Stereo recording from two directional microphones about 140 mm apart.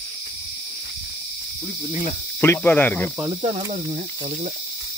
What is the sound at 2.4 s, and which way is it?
Speech, 15° left (ahead or behind).